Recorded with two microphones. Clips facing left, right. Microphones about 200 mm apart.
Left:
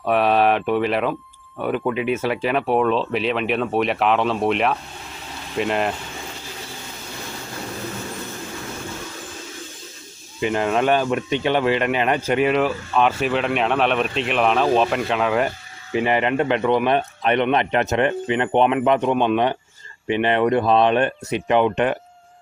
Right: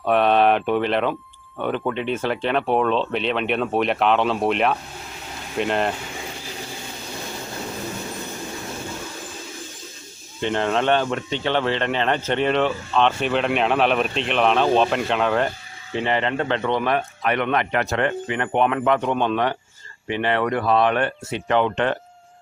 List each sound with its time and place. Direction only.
0.0 s speech: centre (ahead or behind)
10.4 s a man's voice: 5° left (ahead or behind)